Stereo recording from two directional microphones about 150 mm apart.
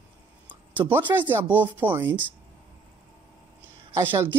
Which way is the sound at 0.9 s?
15° right (ahead or behind).